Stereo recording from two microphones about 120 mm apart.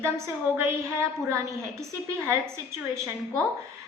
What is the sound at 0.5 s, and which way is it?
A woman's voice, 20° right (ahead or behind).